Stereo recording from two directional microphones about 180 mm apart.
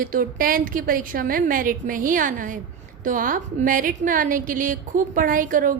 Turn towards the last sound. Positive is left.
turn(degrees=-50)  # may be behind; listen again after turning